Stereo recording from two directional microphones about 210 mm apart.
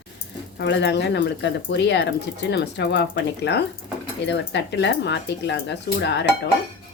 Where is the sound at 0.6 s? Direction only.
55° left (ahead or behind).